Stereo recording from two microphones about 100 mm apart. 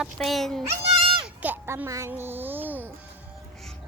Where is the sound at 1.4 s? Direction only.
20° right (ahead or behind).